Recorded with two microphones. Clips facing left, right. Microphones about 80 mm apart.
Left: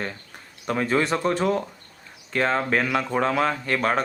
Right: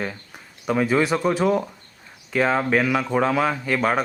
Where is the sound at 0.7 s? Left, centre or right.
Centre.